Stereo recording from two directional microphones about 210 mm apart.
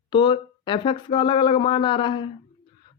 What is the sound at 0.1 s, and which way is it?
Speech, 25° left (ahead or behind).